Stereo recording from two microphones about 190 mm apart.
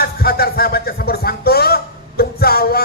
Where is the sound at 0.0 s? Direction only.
55° left (ahead or behind).